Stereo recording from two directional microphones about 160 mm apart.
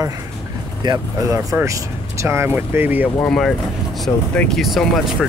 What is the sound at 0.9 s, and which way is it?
Speech, 30° right (ahead or behind).